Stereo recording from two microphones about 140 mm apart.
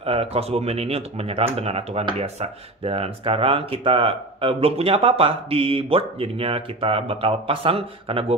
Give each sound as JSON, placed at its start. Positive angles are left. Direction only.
{"t": 0.0, "sound": "speech", "side_deg": -45}